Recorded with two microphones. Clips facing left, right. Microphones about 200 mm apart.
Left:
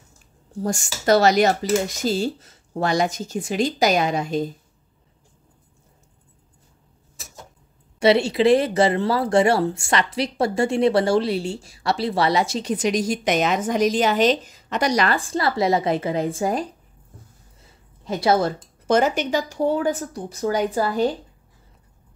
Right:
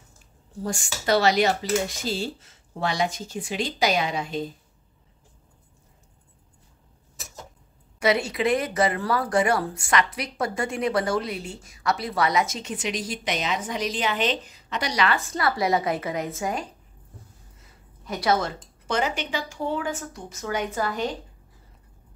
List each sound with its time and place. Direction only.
0.7 s speech: 45° left (ahead or behind)
8.0 s speech: 30° left (ahead or behind)
18.0 s speech: 25° left (ahead or behind)
18.9 s speech: 45° left (ahead or behind)